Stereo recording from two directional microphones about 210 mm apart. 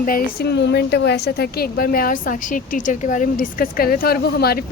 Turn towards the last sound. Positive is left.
turn(degrees=50)  # may be behind; listen again after turning